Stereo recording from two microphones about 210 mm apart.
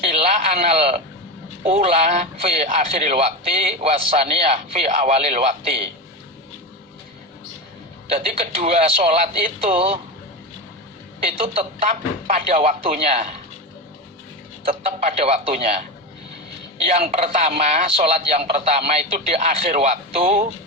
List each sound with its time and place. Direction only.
0.0 s radio: 30° right (ahead or behind)
1.6 s a man's voice: 30° right (ahead or behind)
8.1 s a man's voice: 30° right (ahead or behind)
11.3 s a man's voice: 25° right (ahead or behind)
15.0 s a man's voice: 30° right (ahead or behind)
16.8 s a man's voice: 30° right (ahead or behind)